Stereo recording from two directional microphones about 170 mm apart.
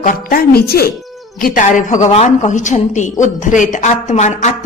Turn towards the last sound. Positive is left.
turn(degrees=45)  # may be behind; listen again after turning